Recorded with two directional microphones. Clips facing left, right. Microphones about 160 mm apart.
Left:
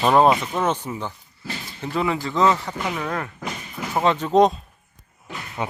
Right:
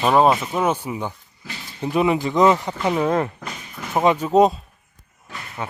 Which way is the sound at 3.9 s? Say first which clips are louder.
Right 2 dB; 10° right (ahead or behind).